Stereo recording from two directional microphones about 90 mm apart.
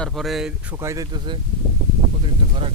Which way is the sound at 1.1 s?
60° right (ahead or behind).